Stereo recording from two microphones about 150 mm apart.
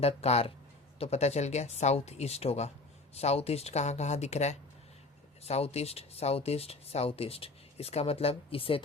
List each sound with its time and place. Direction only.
0.0 s speech: 45° left (ahead or behind)